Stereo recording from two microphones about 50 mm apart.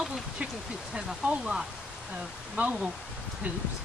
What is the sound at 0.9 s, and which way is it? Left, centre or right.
Speech, centre.